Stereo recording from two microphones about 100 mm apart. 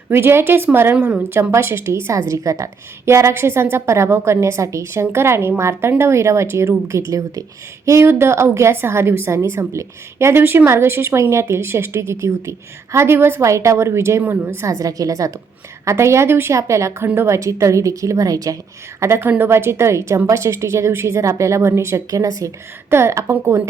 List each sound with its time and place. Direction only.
0.1 s a woman's voice: 25° right (ahead or behind)